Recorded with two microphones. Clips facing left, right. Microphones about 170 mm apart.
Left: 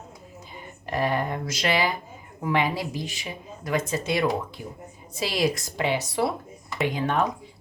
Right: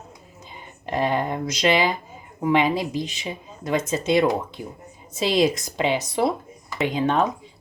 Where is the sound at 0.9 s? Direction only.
20° right (ahead or behind).